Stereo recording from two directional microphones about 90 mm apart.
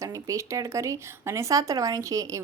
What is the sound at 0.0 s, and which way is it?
A woman's voice, 35° right (ahead or behind).